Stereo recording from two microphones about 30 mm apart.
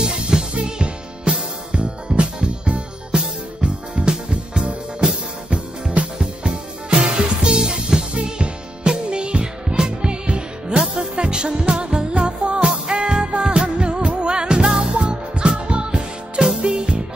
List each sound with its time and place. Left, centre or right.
0.0 s music: right
5.5 s music: right
6.9 s music: right
12.6 s music: right
13.2 s music: right